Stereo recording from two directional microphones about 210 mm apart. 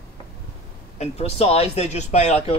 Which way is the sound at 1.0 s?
30° left (ahead or behind).